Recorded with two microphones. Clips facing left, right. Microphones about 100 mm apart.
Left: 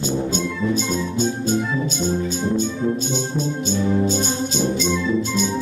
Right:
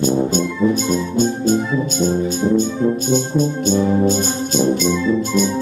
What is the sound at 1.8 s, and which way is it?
Music, 50° right (ahead or behind).